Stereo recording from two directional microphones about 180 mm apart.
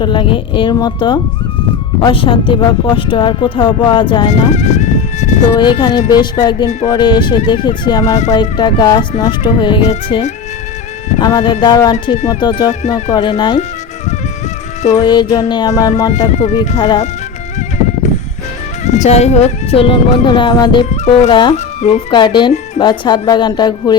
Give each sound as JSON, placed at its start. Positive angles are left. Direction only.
{"t": 0.0, "sound": "speech", "side_deg": 25}
{"t": 4.3, "sound": "speech", "side_deg": 40}
{"t": 5.5, "sound": "speech", "side_deg": 25}
{"t": 15.0, "sound": "speech", "side_deg": 25}
{"t": 16.3, "sound": "speech", "side_deg": 40}
{"t": 16.7, "sound": "speech", "side_deg": 25}
{"t": 18.9, "sound": "speech", "side_deg": 40}
{"t": 20.9, "sound": "speech", "side_deg": 40}
{"t": 21.2, "sound": "speech", "side_deg": 25}
{"t": 21.5, "sound": "speech", "side_deg": 40}
{"t": 22.1, "sound": "speech", "side_deg": 25}